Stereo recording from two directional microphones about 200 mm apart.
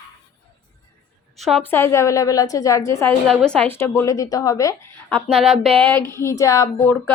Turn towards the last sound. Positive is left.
turn(degrees=15)  # may be behind; listen again after turning